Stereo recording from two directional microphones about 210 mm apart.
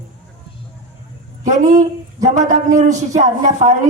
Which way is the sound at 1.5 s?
35° right (ahead or behind).